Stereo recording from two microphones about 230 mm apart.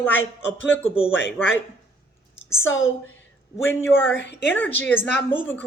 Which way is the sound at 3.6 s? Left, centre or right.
Centre.